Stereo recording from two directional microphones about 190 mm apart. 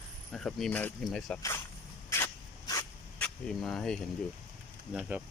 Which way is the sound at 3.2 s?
5° left (ahead or behind).